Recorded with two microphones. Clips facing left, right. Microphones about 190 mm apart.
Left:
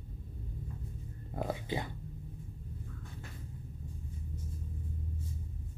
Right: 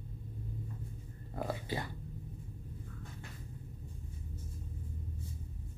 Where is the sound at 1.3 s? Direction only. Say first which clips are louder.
Left 2 dB; 15° left (ahead or behind).